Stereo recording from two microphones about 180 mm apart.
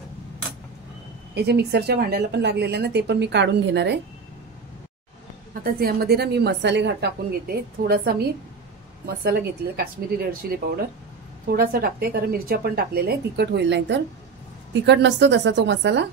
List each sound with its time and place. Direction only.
1.3 s a woman's voice: 65° right (ahead or behind)
5.5 s a woman's voice: 55° right (ahead or behind); by 16.1 s 75° right (ahead or behind)